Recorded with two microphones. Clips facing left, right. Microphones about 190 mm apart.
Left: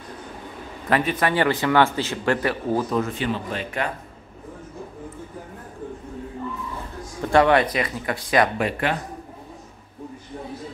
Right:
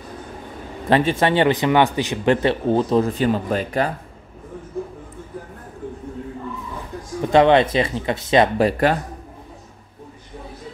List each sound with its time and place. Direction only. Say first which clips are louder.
0.8 s speech: right 4 dB; 30° right (ahead or behind)
7.2 s speech: right 3 dB; 20° right (ahead or behind); by 8.9 s 35° right (ahead or behind)